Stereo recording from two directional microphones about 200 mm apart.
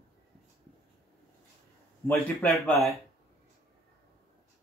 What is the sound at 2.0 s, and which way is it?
Speech, 5° left (ahead or behind).